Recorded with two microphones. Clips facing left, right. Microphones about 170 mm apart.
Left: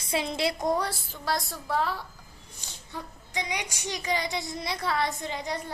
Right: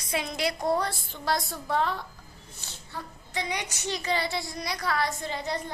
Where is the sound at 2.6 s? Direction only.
15° left (ahead or behind).